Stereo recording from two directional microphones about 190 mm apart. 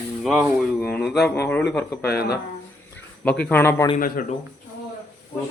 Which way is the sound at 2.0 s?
55° left (ahead or behind).